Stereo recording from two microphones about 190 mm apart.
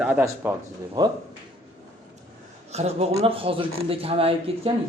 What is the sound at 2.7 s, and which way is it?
Speech, 35° right (ahead or behind).